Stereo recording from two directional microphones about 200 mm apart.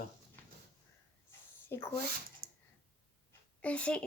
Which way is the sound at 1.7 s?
10° left (ahead or behind).